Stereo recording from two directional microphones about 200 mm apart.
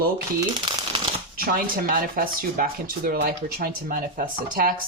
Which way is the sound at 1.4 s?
45° right (ahead or behind).